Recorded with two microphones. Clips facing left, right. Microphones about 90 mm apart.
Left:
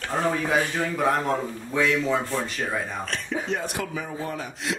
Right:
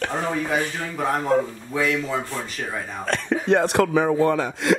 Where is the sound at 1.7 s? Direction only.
Centre (ahead or behind).